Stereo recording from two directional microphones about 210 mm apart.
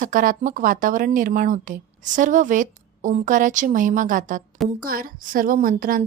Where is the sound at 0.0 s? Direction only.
40° right (ahead or behind).